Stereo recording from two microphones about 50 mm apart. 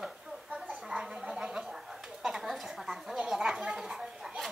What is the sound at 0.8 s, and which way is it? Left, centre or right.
Gargling, centre.